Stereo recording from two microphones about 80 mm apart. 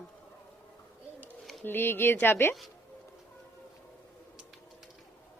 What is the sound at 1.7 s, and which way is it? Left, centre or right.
Speech, left.